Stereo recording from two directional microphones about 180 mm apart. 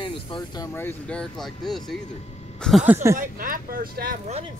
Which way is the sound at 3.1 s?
50° right (ahead or behind).